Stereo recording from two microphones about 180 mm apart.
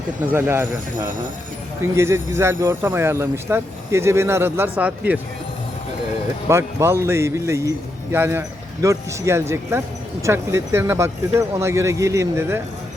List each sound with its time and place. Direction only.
0.3 s speech: 15° right (ahead or behind)
2.0 s speech: 15° right (ahead or behind)
6.5 s speech: 15° right (ahead or behind)